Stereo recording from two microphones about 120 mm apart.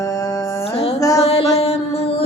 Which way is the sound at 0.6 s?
55° left (ahead or behind).